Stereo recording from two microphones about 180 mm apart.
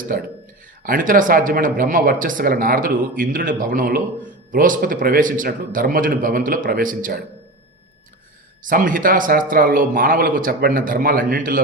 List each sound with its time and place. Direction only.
0.1 s speech: 50° right (ahead or behind)
8.6 s speech: 50° right (ahead or behind)